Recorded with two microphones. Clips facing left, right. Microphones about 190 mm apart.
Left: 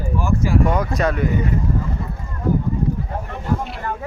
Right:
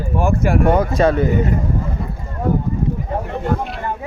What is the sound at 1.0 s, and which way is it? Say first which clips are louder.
Speech: right 5 dB; 30° right (ahead or behind).